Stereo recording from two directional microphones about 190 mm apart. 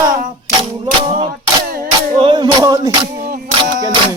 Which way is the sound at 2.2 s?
25° right (ahead or behind).